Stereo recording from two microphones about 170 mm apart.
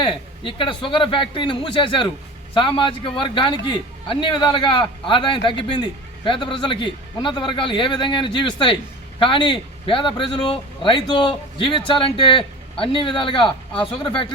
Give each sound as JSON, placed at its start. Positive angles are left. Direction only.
{"t": 0.0, "sound": "a man's voice", "side_deg": 30}